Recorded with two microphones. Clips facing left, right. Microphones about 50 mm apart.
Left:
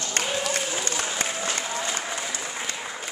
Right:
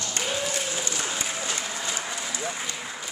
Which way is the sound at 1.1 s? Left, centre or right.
Left.